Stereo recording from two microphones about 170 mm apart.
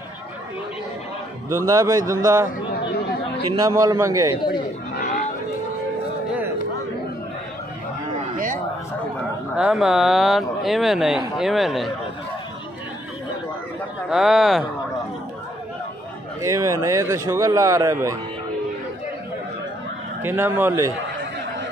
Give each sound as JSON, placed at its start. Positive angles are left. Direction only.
{"t": 1.5, "sound": "speech", "side_deg": -20}
{"t": 3.6, "sound": "speech", "side_deg": -20}
{"t": 4.5, "sound": "chatter", "side_deg": 60}
{"t": 9.6, "sound": "speech", "side_deg": -5}
{"t": 14.1, "sound": "speech", "side_deg": 0}
{"t": 16.3, "sound": "speech", "side_deg": -20}
{"t": 20.2, "sound": "speech", "side_deg": -15}